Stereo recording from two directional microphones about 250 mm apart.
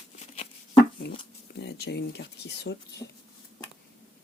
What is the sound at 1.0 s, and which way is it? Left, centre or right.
Speech, left.